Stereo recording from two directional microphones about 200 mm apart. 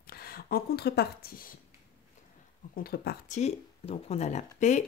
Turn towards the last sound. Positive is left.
turn(degrees=35)  # may be behind; listen again after turning